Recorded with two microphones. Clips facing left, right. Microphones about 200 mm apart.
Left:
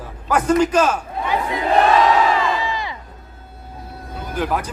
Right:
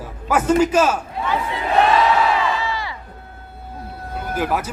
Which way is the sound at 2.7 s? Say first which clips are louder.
Left 1 dB; 20° left (ahead or behind).